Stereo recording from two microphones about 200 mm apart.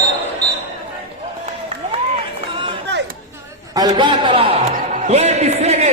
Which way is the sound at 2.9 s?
60° right (ahead or behind).